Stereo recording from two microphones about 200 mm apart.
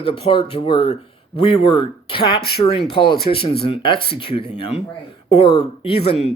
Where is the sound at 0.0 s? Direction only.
25° left (ahead or behind).